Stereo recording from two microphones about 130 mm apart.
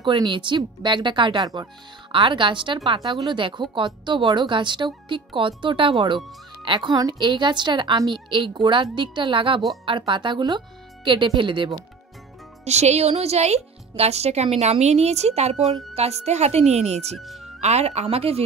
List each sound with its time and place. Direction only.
0.0 s speech: 40° right (ahead or behind)
12.6 s speech: 60° right (ahead or behind)
17.2 s speech: centre (ahead or behind)
17.6 s speech: 55° right (ahead or behind)